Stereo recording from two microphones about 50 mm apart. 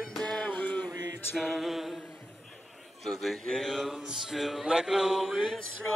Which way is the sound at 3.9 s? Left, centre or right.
Centre.